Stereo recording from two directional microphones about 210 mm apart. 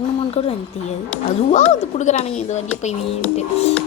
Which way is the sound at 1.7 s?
35° left (ahead or behind).